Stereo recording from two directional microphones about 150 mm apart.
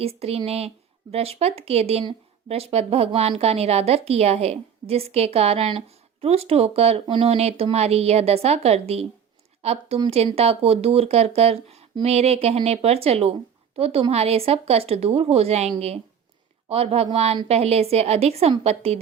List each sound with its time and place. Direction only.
0.0 s a woman's voice: 40° right (ahead or behind)